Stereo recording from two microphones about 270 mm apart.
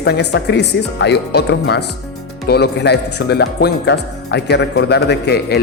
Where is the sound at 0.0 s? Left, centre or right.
Left.